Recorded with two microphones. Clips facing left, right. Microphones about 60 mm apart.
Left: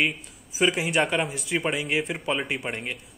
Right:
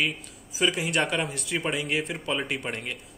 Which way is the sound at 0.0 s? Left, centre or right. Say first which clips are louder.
Left 3 dB; left.